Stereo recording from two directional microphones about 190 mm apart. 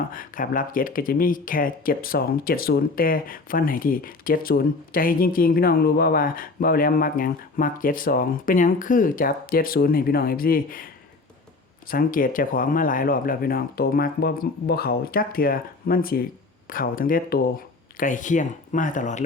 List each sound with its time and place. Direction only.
0.1 s speech: 45° left (ahead or behind)
11.9 s speech: 50° left (ahead or behind)